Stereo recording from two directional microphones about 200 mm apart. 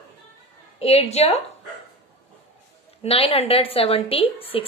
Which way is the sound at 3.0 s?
30° left (ahead or behind).